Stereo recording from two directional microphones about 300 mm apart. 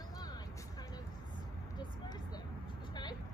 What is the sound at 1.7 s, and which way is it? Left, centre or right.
Vehicle, centre.